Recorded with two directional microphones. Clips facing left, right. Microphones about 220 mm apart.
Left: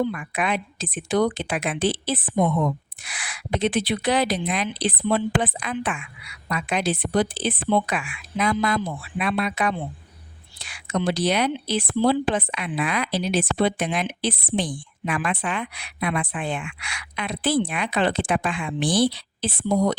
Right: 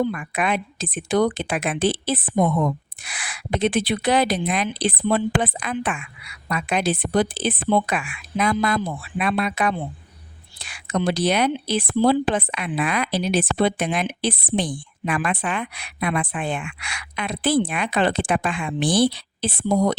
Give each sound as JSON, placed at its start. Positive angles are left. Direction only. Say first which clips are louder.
{"t": 0.0, "sound": "a woman's voice", "louder": "right 2 dB", "side_deg": -50}